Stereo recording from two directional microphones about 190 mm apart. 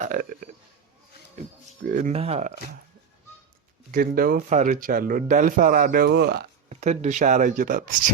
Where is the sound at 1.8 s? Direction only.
45° right (ahead or behind).